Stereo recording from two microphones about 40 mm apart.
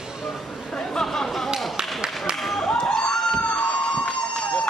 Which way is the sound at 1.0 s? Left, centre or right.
Centre.